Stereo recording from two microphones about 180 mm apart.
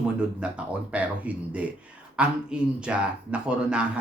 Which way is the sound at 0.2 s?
5° right (ahead or behind).